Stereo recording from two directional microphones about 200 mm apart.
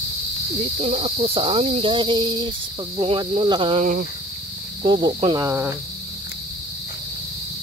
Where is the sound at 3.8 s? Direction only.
40° right (ahead or behind).